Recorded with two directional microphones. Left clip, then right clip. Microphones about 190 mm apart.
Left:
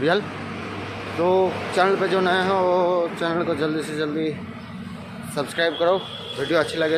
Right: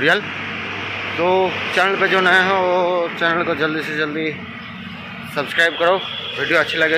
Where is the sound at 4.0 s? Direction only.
15° left (ahead or behind).